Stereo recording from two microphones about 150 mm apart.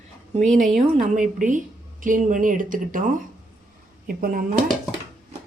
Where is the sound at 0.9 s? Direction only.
55° right (ahead or behind).